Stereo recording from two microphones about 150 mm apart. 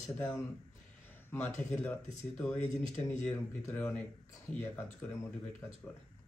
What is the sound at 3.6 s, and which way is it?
Speech, 15° left (ahead or behind).